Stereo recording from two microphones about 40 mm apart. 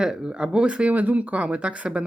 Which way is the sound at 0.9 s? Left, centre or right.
Right.